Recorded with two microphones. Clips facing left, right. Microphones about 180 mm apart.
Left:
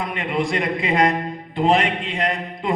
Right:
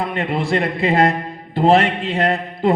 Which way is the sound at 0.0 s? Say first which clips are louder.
Right 2 dB; 30° right (ahead or behind).